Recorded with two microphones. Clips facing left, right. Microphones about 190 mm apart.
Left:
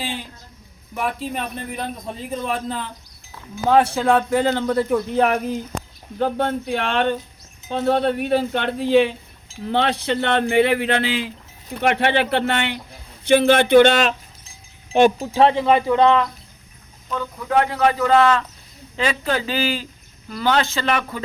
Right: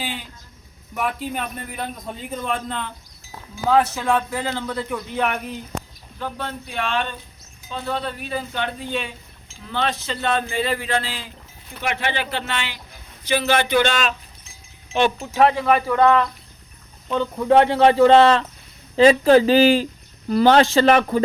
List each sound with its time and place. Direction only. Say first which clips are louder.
0.9 s a man's voice: even; centre (ahead or behind)
3.7 s a man's voice: left 3 dB; 30° left (ahead or behind)
6.1 s speech: left 9 dB; 60° left (ahead or behind)
14.4 s speech: left 1 dB; 40° left (ahead or behind); by 16.2 s 20° left (ahead or behind)
17.1 s a man's voice: right 6 dB; 25° right (ahead or behind)